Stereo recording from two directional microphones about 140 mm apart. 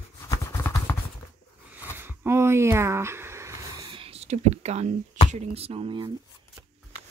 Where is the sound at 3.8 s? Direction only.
40° right (ahead or behind).